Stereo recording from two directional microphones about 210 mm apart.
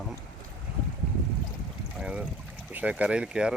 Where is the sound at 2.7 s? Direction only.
5° right (ahead or behind).